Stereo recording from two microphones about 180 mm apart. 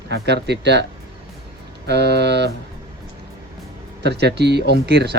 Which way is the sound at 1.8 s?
65° right (ahead or behind).